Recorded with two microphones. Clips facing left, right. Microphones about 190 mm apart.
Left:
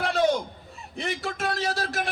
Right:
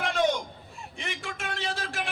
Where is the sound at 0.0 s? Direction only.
35° left (ahead or behind).